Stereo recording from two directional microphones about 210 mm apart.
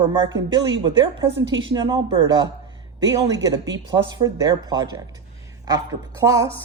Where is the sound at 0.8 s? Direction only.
25° right (ahead or behind).